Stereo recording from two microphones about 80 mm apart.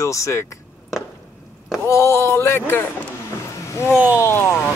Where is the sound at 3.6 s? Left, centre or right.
Left.